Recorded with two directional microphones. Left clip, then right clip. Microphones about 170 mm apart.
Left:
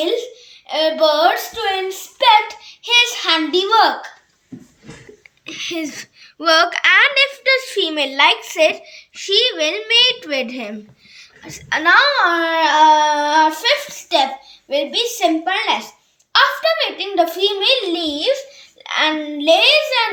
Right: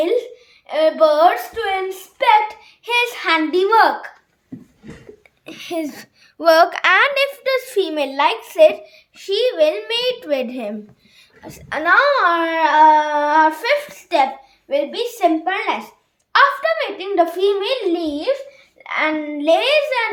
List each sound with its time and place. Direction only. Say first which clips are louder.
0.0 s a child's voice: right 1 dB; 15° right (ahead or behind)
0.7 s a sound: right 1 dB; 15° right (ahead or behind)
2.8 s a child's voice: left 4 dB; 20° right (ahead or behind)
5.5 s a woman's voice: left 1 dB; 55° right (ahead or behind); by 10.8 s 35° right (ahead or behind)
11.4 s a woman's voice: left 5 dB; 45° right (ahead or behind)
11.8 s a child's voice: left 1 dB; 70° right (ahead or behind)
12.5 s a child's voice: even; 20° right (ahead or behind)